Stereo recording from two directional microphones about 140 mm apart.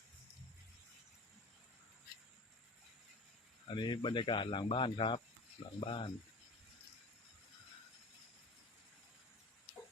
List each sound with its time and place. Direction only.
3.7 s speech: 35° left (ahead or behind)